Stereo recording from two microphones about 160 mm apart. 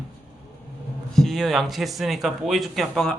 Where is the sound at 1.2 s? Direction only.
Centre (ahead or behind).